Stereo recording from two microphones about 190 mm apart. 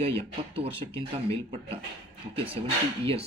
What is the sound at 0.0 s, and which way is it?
Speech, 30° right (ahead or behind).